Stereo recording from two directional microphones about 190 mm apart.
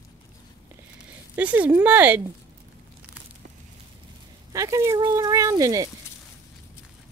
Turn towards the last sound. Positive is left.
turn(degrees=-20)  # may be behind; listen again after turning